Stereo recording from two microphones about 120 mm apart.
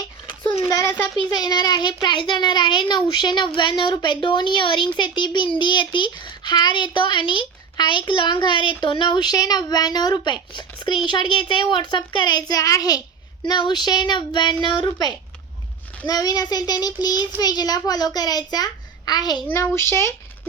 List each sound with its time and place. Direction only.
0.6 s speech: 25° left (ahead or behind)
1.3 s a woman's voice: 35° left (ahead or behind)
19.5 s speech: 20° left (ahead or behind)